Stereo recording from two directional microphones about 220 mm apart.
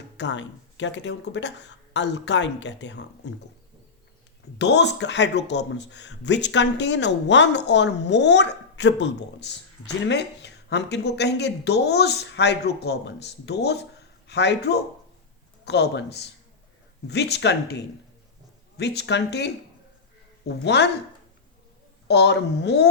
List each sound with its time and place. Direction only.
0.2 s speech: 55° left (ahead or behind)
4.5 s speech: 50° left (ahead or behind)
20.5 s speech: 50° left (ahead or behind)
22.0 s speech: 50° left (ahead or behind)